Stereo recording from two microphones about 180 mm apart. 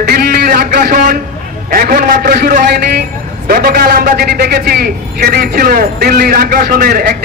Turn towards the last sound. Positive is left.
turn(degrees=-55)  # may be behind; listen again after turning